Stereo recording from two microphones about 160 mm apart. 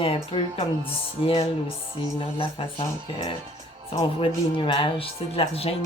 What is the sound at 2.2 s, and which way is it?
Speech, 35° left (ahead or behind).